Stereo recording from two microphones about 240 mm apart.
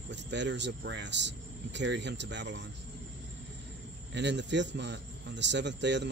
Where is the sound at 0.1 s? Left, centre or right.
Right.